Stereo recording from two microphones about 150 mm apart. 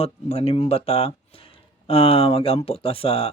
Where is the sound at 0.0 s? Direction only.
45° left (ahead or behind).